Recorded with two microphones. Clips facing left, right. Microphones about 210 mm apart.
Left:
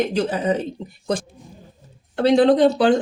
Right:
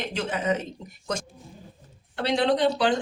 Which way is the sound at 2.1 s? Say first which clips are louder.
Left 9 dB; 45° left (ahead or behind).